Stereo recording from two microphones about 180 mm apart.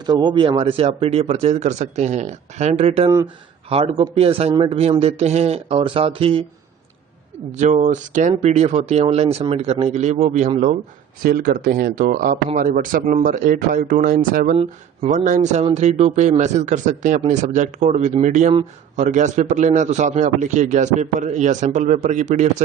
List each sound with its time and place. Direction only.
0.0 s speech: 25° right (ahead or behind)
7.5 s speech: 40° right (ahead or behind)
11.2 s speech: 55° right (ahead or behind)
14.5 s speech: 35° right (ahead or behind)